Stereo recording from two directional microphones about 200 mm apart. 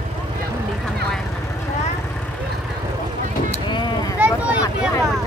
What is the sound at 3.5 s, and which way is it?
Vehicle, 25° left (ahead or behind).